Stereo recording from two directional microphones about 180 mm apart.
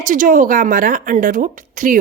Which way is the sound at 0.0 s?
45° right (ahead or behind).